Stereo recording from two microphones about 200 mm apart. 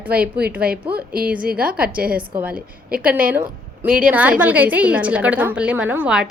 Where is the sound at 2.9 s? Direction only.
5° right (ahead or behind).